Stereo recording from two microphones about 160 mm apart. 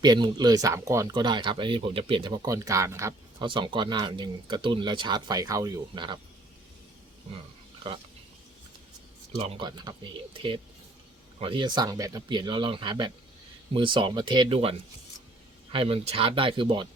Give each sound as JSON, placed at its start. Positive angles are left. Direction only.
{"t": 0.0, "sound": "speech", "side_deg": -25}
{"t": 3.4, "sound": "speech", "side_deg": -30}
{"t": 9.6, "sound": "speech", "side_deg": -30}